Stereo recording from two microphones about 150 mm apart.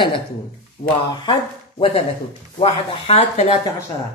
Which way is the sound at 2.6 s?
45° left (ahead or behind).